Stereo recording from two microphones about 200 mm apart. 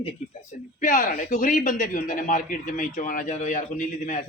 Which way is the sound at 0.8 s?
40° left (ahead or behind).